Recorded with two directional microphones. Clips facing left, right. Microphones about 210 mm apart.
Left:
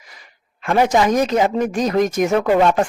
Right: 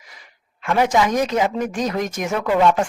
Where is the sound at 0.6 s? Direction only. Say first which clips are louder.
Left 2 dB; 35° left (ahead or behind).